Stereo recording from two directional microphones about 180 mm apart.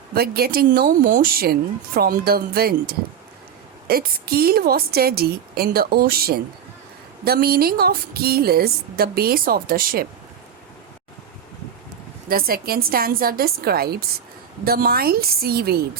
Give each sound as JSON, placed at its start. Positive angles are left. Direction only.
{"t": 0.1, "sound": "speech", "side_deg": -60}
{"t": 12.3, "sound": "speech", "side_deg": -55}